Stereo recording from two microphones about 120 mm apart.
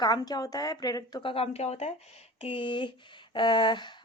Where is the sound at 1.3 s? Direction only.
55° left (ahead or behind).